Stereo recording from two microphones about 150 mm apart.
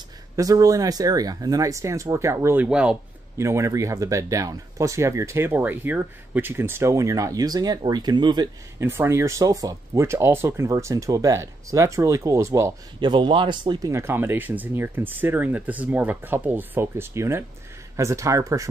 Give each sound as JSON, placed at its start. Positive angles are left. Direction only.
{"t": 0.4, "sound": "speech", "side_deg": -25}
{"t": 3.3, "sound": "speech", "side_deg": -20}
{"t": 8.8, "sound": "speech", "side_deg": -15}
{"t": 13.0, "sound": "speech", "side_deg": -30}
{"t": 13.9, "sound": "speech", "side_deg": -15}